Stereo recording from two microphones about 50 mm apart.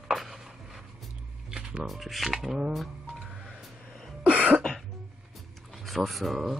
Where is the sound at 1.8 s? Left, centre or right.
Centre.